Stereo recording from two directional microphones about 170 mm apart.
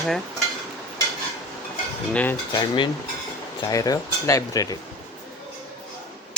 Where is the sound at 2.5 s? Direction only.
25° left (ahead or behind).